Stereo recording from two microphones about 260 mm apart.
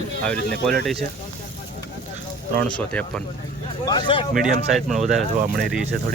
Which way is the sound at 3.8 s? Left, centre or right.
Centre.